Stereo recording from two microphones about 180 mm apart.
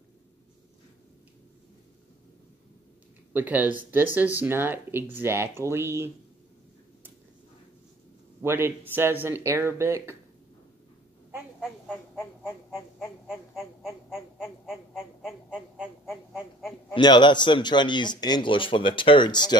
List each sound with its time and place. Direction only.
3.3 s speech: 10° right (ahead or behind)
8.4 s speech: 15° right (ahead or behind)
13.3 s quack: centre (ahead or behind)
16.9 s speech: 25° left (ahead or behind)